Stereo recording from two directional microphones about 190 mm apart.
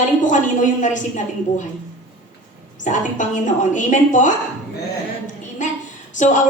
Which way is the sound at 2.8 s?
40° left (ahead or behind).